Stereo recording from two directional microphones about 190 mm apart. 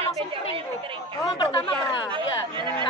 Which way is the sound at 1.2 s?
20° left (ahead or behind).